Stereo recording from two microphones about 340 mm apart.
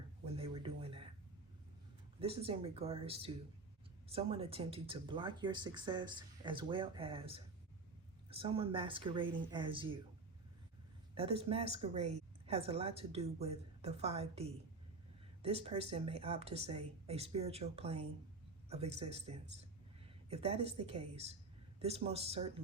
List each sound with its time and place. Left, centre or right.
0.3 s a sound: centre
2.2 s speech: centre
11.1 s speech: centre